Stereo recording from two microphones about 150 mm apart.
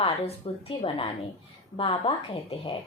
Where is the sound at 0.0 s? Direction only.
40° left (ahead or behind).